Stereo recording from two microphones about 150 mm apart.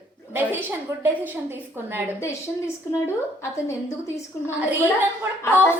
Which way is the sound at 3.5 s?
20° left (ahead or behind).